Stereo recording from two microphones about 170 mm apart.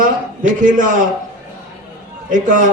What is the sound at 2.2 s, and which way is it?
Speech, 50° right (ahead or behind).